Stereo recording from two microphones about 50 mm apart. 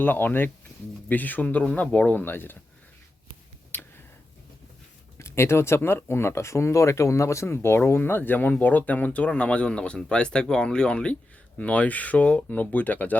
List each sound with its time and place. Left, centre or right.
0.0 s speech: left
2.3 s speech: left
5.1 s speech: left
7.9 s speech: left